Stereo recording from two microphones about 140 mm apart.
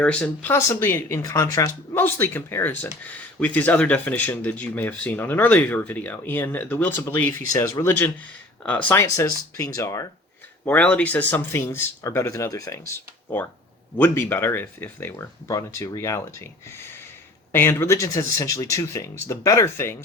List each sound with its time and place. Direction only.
0.0 s speech: 10° left (ahead or behind)
10.7 s speech: 10° left (ahead or behind)
13.9 s speech: 15° left (ahead or behind)